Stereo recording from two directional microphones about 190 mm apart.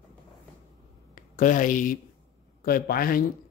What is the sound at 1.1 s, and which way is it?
Speech, 45° left (ahead or behind).